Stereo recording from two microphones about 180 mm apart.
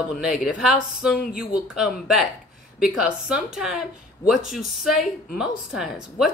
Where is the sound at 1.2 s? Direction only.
55° left (ahead or behind).